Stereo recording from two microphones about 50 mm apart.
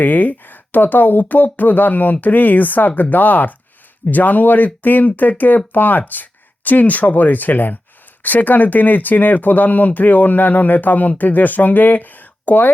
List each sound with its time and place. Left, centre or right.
0.0 s speech: left